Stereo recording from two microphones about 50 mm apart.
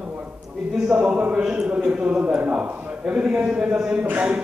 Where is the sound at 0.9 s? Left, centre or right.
Right.